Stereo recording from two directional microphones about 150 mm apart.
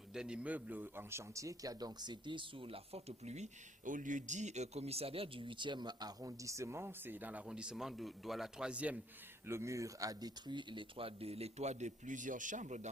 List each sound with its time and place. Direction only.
0.1 s a man's voice: 5° right (ahead or behind)
9.5 s speech: 20° right (ahead or behind); by 12.9 s 55° right (ahead or behind)